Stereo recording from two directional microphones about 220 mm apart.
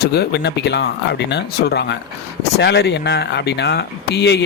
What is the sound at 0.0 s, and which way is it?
Speech, 45° left (ahead or behind).